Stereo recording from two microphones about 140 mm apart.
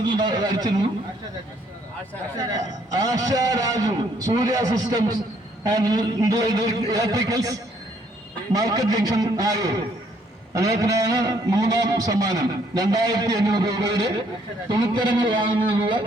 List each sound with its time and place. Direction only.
0.0 s a man's voice: 30° right (ahead or behind)
2.4 s a man's voice: 25° right (ahead or behind)
8.5 s a man's voice: 25° right (ahead or behind)